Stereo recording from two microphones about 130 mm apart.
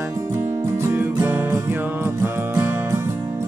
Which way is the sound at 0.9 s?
20° right (ahead or behind).